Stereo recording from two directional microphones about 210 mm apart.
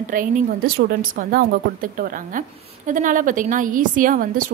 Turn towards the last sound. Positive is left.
turn(degrees=-40)  # may be behind; listen again after turning